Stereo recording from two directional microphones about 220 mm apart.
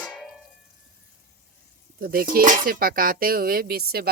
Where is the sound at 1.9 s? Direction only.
45° right (ahead or behind).